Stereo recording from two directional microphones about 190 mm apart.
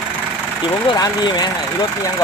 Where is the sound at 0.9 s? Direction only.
20° left (ahead or behind).